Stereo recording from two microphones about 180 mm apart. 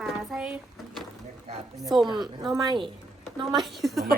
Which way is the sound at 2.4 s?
25° right (ahead or behind).